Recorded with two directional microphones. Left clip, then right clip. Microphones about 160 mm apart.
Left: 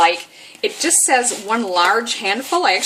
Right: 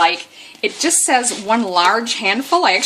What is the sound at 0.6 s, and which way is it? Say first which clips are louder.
A woman's voice: right 1 dB; 45° right (ahead or behind).